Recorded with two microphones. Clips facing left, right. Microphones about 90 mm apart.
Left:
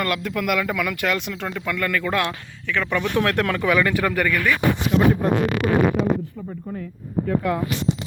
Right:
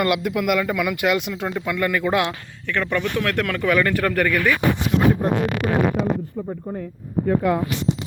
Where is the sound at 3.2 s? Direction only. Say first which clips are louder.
Left 2 dB; 25° left (ahead or behind).